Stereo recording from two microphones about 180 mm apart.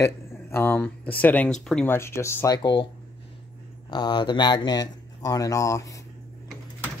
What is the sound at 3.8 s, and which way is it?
Speech, 25° left (ahead or behind).